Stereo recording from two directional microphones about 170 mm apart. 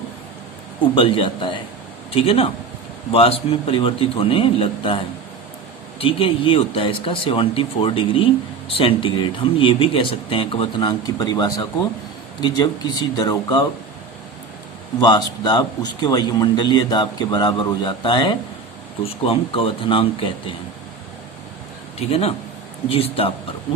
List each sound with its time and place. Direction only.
0.9 s a man's voice: 30° left (ahead or behind)
15.0 s a man's voice: 25° left (ahead or behind)
21.9 s speech: 35° left (ahead or behind)